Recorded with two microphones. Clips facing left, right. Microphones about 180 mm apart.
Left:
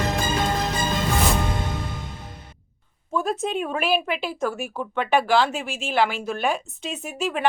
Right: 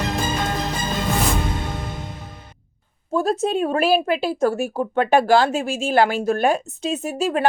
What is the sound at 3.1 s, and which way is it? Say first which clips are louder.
Speech: right 5 dB; 40° right (ahead or behind).